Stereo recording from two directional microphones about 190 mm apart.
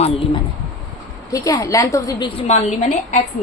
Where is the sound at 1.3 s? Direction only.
15° left (ahead or behind); by 3.2 s 35° left (ahead or behind).